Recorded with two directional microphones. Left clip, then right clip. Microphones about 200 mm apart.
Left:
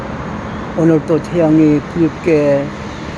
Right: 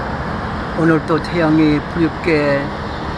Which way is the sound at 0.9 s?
30° left (ahead or behind).